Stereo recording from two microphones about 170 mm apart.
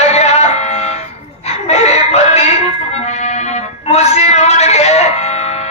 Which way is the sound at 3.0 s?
40° left (ahead or behind).